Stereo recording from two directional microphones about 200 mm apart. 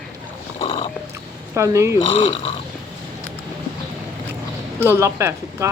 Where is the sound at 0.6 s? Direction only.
25° left (ahead or behind).